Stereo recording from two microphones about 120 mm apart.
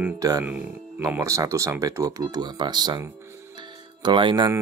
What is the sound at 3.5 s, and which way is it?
Music, 40° right (ahead or behind).